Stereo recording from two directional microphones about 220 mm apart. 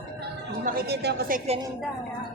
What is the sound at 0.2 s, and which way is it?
Speech, 45° right (ahead or behind).